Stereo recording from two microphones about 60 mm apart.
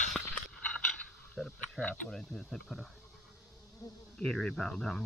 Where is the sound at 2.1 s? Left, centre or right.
Centre.